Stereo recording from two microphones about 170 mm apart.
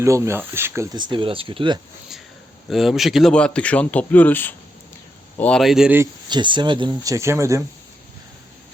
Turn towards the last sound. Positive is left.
turn(degrees=-15)  # may be behind; listen again after turning